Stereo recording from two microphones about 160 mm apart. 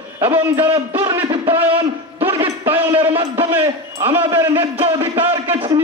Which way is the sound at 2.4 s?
10° right (ahead or behind).